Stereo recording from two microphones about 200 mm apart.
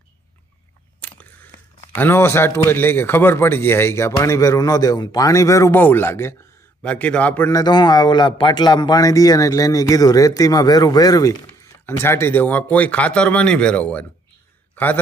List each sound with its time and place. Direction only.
1.0 s biting: 5° left (ahead or behind)
2.0 s speech: 10° left (ahead or behind)
7.6 s speech: 20° left (ahead or behind)